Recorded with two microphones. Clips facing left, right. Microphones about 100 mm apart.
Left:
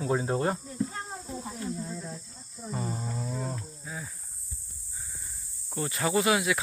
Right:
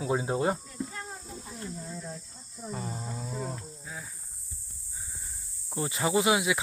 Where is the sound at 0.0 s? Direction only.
10° right (ahead or behind).